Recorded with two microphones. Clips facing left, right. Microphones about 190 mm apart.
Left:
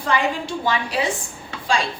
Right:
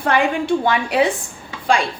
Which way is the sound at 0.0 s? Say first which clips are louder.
Right 4 dB; 55° right (ahead or behind).